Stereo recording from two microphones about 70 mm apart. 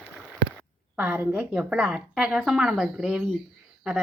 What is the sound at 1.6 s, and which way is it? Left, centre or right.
A woman's voice, centre.